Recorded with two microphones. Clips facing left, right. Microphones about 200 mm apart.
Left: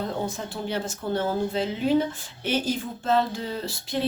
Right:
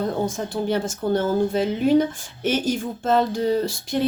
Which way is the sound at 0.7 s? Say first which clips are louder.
Right 5 dB; 45° right (ahead or behind).